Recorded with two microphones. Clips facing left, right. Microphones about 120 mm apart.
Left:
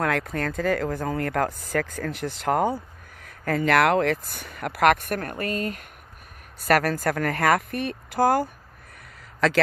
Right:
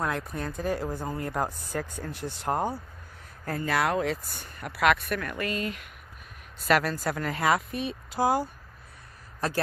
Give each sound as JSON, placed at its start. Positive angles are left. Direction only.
{"t": 0.0, "sound": "speech", "side_deg": 85}
{"t": 4.7, "sound": "speech", "side_deg": 55}